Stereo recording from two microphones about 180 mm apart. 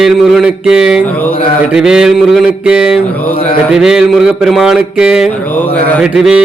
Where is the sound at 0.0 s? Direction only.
Centre (ahead or behind).